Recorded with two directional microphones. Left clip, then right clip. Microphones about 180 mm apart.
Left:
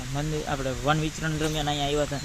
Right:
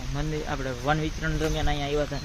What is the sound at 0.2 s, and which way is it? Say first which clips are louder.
Speech: left 1 dB; 65° left (ahead or behind).